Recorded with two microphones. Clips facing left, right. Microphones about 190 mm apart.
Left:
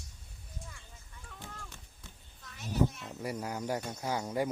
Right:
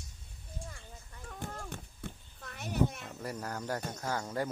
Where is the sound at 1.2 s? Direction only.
45° right (ahead or behind).